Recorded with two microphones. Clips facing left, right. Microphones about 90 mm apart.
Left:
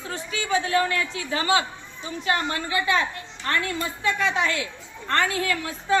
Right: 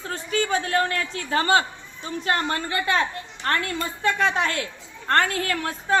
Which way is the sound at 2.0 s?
45° right (ahead or behind).